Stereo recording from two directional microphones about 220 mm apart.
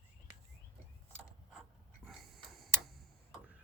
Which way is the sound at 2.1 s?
Centre (ahead or behind).